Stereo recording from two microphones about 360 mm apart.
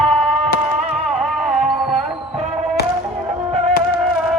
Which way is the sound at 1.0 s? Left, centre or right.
Centre.